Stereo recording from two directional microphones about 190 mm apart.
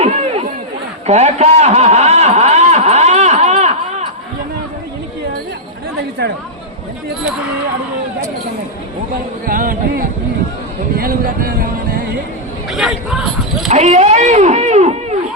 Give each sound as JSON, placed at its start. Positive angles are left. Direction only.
{"t": 1.0, "sound": "a sound", "side_deg": -35}
{"t": 9.5, "sound": "speech", "side_deg": -45}
{"t": 12.7, "sound": "speech", "side_deg": 0}
{"t": 13.7, "sound": "speech", "side_deg": -35}